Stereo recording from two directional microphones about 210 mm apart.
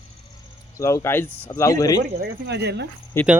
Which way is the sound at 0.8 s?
15° left (ahead or behind).